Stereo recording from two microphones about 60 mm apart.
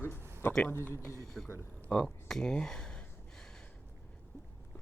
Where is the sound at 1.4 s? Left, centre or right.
Centre.